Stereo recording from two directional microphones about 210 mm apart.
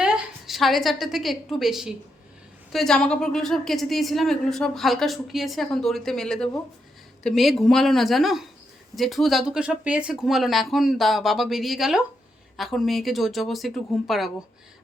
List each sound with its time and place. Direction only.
0.0 s a woman's voice: centre (ahead or behind)